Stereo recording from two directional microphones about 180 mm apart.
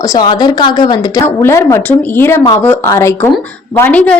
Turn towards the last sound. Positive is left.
turn(degrees=10)  # may be behind; listen again after turning